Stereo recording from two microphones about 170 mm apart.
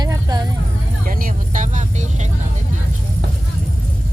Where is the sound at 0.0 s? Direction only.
25° right (ahead or behind).